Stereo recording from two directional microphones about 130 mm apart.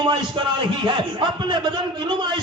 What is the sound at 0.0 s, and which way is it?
A man's voice, 35° right (ahead or behind).